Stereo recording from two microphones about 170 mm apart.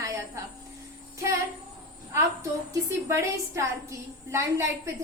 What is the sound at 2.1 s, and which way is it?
A woman's voice, 20° right (ahead or behind).